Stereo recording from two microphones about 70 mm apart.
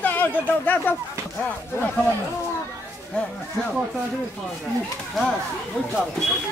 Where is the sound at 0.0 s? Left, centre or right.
Left.